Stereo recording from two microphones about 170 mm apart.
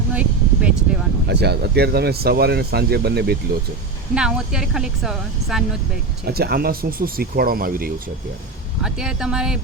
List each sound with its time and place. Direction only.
0.1 s a sound: 5° right (ahead or behind)
1.3 s speech: 75° right (ahead or behind)
4.1 s speech: 5° right (ahead or behind)
6.2 s speech: 65° right (ahead or behind)
8.8 s speech: 5° right (ahead or behind)